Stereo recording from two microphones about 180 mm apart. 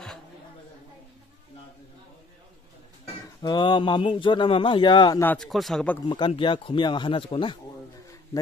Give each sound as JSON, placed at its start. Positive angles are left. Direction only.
{"t": 3.4, "sound": "speech", "side_deg": 25}
{"t": 5.2, "sound": "speech", "side_deg": 5}
{"t": 6.0, "sound": "speech", "side_deg": 25}